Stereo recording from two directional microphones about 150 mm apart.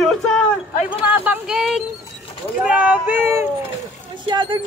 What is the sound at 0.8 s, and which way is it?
Speech, 10° right (ahead or behind).